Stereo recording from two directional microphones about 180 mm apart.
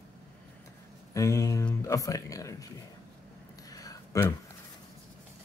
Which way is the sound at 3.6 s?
20° left (ahead or behind).